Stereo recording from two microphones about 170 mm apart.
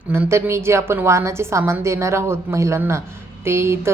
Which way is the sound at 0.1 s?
15° right (ahead or behind).